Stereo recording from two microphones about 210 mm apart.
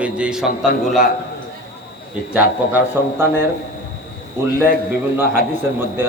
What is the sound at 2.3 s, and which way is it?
A man's voice, 10° right (ahead or behind).